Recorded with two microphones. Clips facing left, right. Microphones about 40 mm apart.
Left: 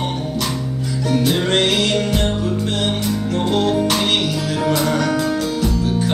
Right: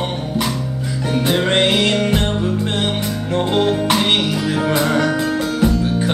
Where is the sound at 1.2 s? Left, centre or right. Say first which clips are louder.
Right 3 dB; right.